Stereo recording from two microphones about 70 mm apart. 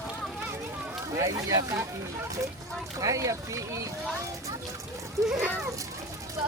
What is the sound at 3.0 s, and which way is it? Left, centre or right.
Speech, right.